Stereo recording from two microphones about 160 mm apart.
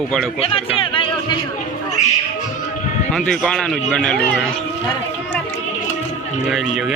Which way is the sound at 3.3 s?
5° left (ahead or behind).